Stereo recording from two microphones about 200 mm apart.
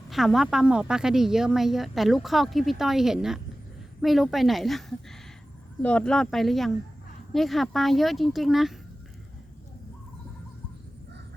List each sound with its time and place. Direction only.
0.1 s a woman's voice: centre (ahead or behind)